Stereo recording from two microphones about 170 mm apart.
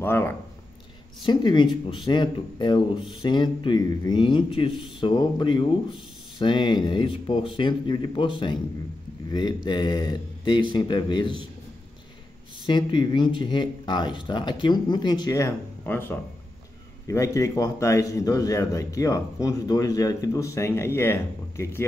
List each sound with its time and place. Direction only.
0.0 s speech: 15° left (ahead or behind)
1.2 s a man's voice: 25° left (ahead or behind)
12.6 s a man's voice: 25° left (ahead or behind)